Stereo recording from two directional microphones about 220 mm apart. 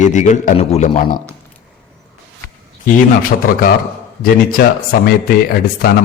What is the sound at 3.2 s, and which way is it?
A man's voice, 40° left (ahead or behind).